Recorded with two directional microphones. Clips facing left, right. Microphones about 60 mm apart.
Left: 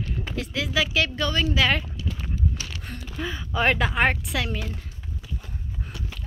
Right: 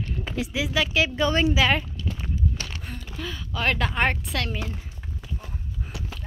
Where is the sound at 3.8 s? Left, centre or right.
Centre.